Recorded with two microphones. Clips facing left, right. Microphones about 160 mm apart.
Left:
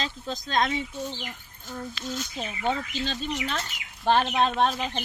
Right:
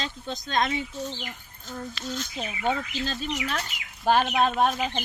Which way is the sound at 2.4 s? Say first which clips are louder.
Right 1 dB; 10° right (ahead or behind).